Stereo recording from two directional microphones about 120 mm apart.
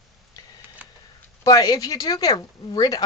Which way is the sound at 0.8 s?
10° right (ahead or behind).